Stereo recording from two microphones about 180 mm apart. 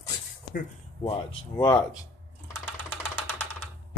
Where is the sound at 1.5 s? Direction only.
20° left (ahead or behind).